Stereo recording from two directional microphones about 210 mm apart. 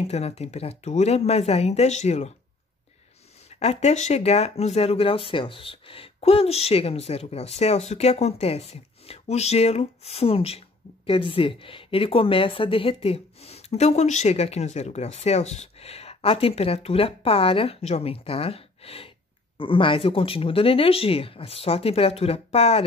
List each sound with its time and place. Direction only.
0.0 s speech: 30° left (ahead or behind)
3.5 s a woman's voice: 30° left (ahead or behind)